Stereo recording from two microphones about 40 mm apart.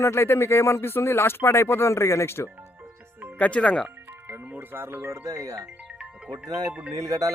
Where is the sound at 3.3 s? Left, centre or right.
Left.